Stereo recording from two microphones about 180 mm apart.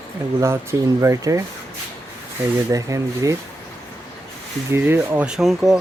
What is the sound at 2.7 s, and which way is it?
Speech, 20° right (ahead or behind).